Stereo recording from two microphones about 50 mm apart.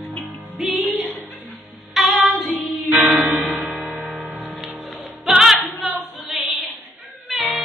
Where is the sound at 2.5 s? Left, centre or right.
Right.